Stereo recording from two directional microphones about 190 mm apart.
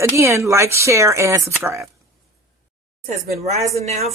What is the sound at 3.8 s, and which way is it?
Speech, 35° right (ahead or behind).